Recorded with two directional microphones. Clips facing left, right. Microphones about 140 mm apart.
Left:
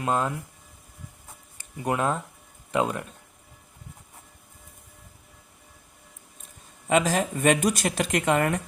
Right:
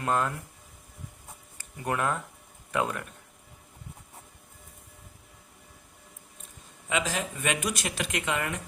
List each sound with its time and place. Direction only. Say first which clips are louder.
0.0 s speech: left 2 dB; 15° left (ahead or behind)
1.5 s speech: left 3 dB; 20° left (ahead or behind)
6.8 s speech: left 7 dB; 45° left (ahead or behind)